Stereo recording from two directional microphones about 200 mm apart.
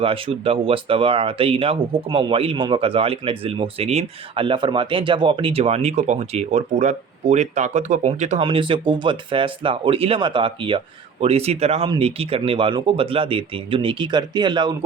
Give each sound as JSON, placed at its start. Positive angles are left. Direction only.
{"t": 0.0, "sound": "speech", "side_deg": -30}